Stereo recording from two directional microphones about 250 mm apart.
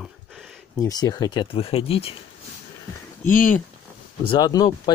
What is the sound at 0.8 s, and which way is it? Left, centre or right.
Speech, centre.